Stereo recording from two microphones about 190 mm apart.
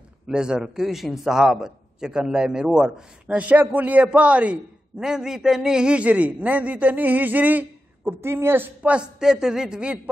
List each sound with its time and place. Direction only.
0.3 s a man's voice: 5° right (ahead or behind)